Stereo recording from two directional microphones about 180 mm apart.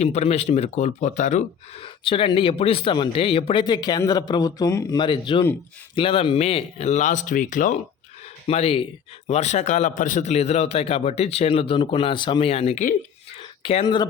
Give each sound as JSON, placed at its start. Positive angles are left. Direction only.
{"t": 0.0, "sound": "speech", "side_deg": 35}
{"t": 8.4, "sound": "speech", "side_deg": 35}